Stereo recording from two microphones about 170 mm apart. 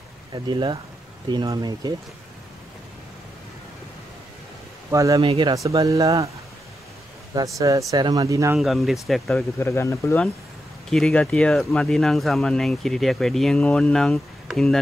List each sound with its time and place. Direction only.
0.3 s speech: 25° right (ahead or behind)
4.9 s speech: 20° right (ahead or behind)
5.2 s speech: 30° right (ahead or behind)
7.3 s speech: 20° right (ahead or behind)
8.5 s speech: centre (ahead or behind)
9.6 s speech: 15° left (ahead or behind)
10.9 s speech: 5° left (ahead or behind)